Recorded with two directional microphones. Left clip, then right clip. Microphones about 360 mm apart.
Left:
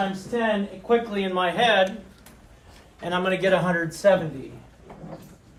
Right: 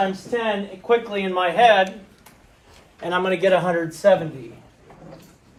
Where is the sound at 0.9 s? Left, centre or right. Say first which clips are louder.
Right 3 dB; centre.